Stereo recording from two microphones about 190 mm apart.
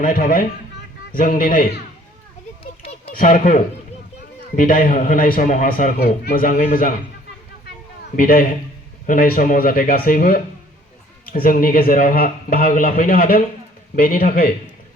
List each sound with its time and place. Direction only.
0.0 s a man's voice: 45° left (ahead or behind)
3.2 s a man's voice: 45° left (ahead or behind)
8.1 s a man's voice: 50° left (ahead or behind)